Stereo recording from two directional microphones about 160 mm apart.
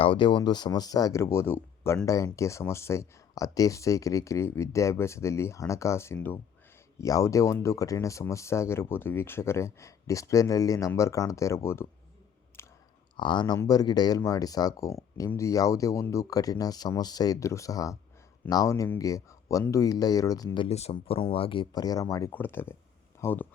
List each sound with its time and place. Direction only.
0.0 s speech: 30° left (ahead or behind)
12.6 s chewing: 15° left (ahead or behind)
13.1 s speech: 30° left (ahead or behind); by 23.5 s 10° left (ahead or behind)